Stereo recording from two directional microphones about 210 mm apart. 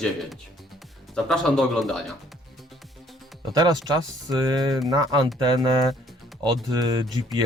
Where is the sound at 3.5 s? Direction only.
20° right (ahead or behind).